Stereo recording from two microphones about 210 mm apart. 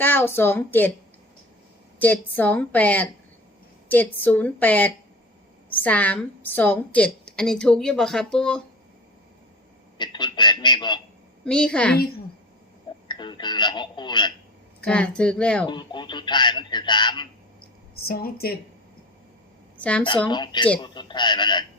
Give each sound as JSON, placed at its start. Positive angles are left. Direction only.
{"t": 0.0, "sound": "a woman's voice", "side_deg": 10}
{"t": 2.0, "sound": "a woman's voice", "side_deg": 10}
{"t": 10.0, "sound": "a man's voice", "side_deg": 20}
{"t": 11.4, "sound": "a woman's voice", "side_deg": 5}
{"t": 13.1, "sound": "speech", "side_deg": 20}
{"t": 14.8, "sound": "a woman's voice", "side_deg": 5}
{"t": 15.6, "sound": "speech", "side_deg": 20}
{"t": 17.9, "sound": "a woman's voice", "side_deg": 45}
{"t": 19.7, "sound": "speech", "side_deg": 5}
{"t": 20.2, "sound": "speech", "side_deg": 20}